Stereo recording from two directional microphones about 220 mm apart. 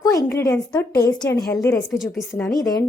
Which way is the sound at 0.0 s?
15° left (ahead or behind).